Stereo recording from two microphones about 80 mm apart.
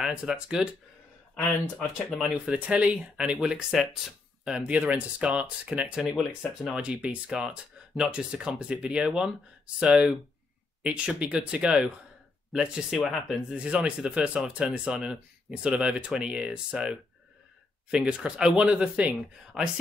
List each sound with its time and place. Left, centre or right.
0.0 s speech: centre
2.0 s speech: centre
2.4 s speech: centre
3.7 s speech: centre
4.5 s speech: centre
6.8 s speech: centre
13.0 s speech: centre
13.7 s speech: centre